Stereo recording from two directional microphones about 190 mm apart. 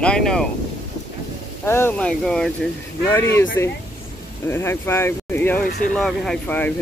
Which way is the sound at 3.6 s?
15° left (ahead or behind).